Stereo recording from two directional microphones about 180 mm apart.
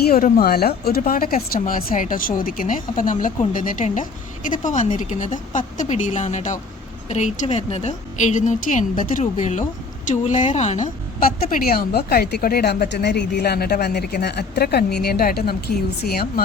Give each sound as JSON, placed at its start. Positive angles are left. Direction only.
{"t": 0.0, "sound": "a woman's voice", "side_deg": 55}